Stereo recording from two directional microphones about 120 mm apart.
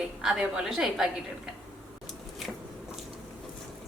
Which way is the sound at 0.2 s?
5° right (ahead or behind).